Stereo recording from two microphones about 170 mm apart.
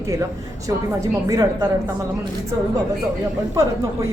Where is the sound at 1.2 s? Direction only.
20° right (ahead or behind).